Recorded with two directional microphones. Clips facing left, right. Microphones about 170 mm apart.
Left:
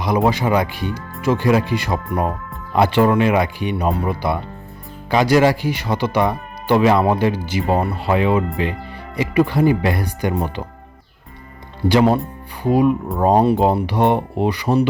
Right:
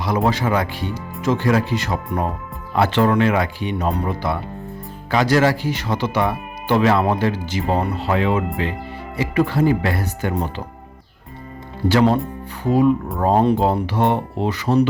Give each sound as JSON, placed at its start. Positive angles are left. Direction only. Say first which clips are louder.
{"t": 0.0, "sound": "speech", "louder": "left 2 dB", "side_deg": 15}
{"t": 11.9, "sound": "speech", "louder": "left 1 dB", "side_deg": 15}